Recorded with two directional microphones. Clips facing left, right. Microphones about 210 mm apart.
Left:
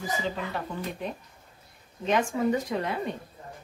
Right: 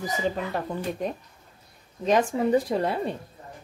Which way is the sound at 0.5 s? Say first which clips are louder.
Right 4 dB; 45° right (ahead or behind).